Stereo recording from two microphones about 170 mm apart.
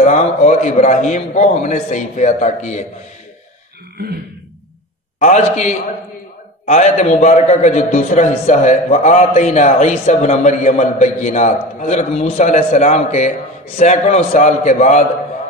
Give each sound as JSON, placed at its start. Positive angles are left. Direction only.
{"t": 0.0, "sound": "a man's voice", "side_deg": 45}
{"t": 5.2, "sound": "a man's voice", "side_deg": 45}